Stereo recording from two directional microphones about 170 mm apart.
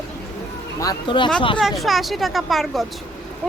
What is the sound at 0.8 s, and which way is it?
Speech, 25° left (ahead or behind).